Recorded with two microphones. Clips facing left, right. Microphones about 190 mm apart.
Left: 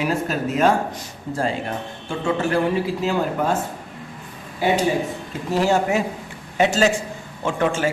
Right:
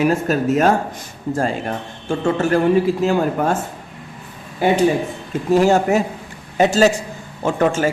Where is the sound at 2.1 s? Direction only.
45° right (ahead or behind).